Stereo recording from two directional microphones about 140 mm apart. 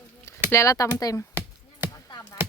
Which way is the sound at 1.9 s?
30° left (ahead or behind).